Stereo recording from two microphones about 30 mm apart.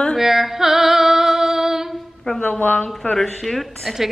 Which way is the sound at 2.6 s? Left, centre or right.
Left.